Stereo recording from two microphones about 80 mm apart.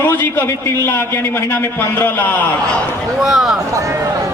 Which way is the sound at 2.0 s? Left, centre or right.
Left.